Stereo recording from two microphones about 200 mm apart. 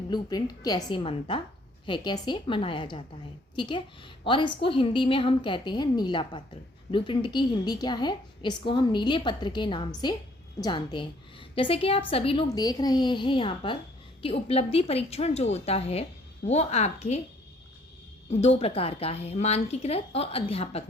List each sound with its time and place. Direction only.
0.1 s a woman's voice: 20° left (ahead or behind)
18.3 s a woman's voice: 30° left (ahead or behind)